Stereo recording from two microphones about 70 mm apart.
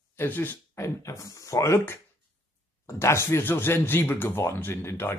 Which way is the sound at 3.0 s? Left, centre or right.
Left.